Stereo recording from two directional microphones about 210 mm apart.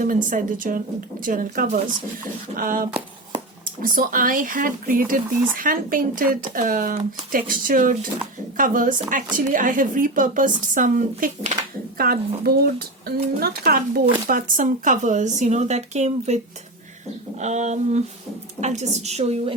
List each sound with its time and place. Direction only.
0.0 s speech: 40° right (ahead or behind)
17.4 s speech: 35° right (ahead or behind)